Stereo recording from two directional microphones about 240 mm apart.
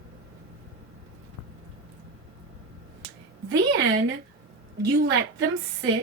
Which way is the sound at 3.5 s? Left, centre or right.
Right.